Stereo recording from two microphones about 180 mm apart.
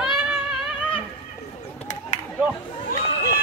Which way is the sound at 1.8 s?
45° left (ahead or behind).